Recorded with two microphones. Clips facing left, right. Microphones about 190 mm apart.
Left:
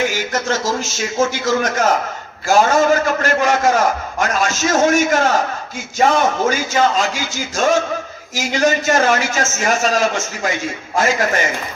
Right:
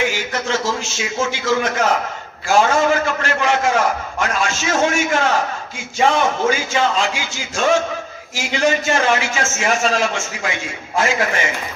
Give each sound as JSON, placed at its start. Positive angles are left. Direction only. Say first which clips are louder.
{"t": 0.1, "sound": "a man's voice", "louder": "left 2 dB", "side_deg": 40}